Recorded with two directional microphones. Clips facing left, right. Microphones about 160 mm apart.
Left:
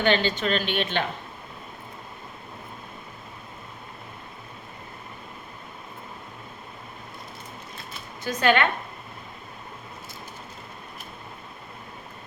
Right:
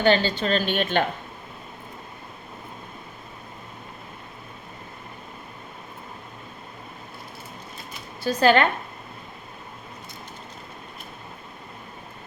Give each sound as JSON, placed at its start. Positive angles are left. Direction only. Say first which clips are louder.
{"t": 0.0, "sound": "a woman's voice", "louder": "right 2 dB", "side_deg": -35}
{"t": 8.2, "sound": "a woman's voice", "louder": "right 3 dB", "side_deg": -35}